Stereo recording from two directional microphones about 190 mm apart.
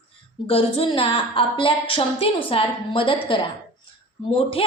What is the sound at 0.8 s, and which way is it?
A woman's voice, 25° left (ahead or behind).